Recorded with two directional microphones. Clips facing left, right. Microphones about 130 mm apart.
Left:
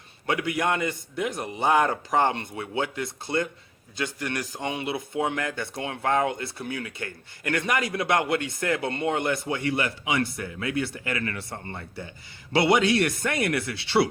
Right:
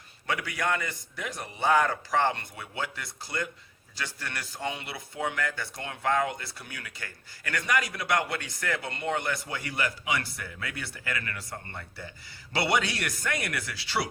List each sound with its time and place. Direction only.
0.3 s speech: 20° left (ahead or behind)